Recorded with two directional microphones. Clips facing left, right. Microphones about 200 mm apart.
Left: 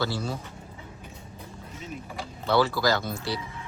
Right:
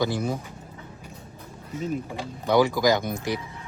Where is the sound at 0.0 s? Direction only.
15° right (ahead or behind).